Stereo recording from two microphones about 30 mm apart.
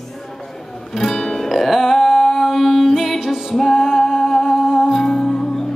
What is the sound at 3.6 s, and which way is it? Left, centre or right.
Music, centre.